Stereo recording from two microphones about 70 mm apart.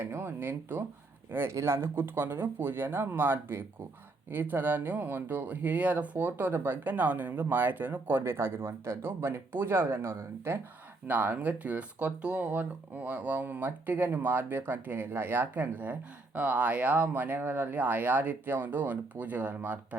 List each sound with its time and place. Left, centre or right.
0.0 s speech: right
11.1 s speech: right